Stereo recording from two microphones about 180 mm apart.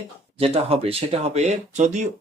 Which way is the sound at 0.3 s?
35° right (ahead or behind).